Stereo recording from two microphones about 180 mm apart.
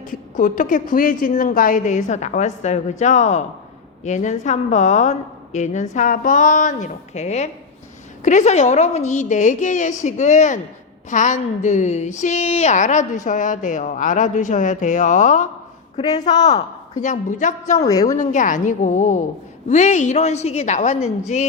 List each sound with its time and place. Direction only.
0.0 s a woman's voice: 45° left (ahead or behind)
16.0 s speech: 20° left (ahead or behind)
17.0 s a woman's voice: 45° left (ahead or behind)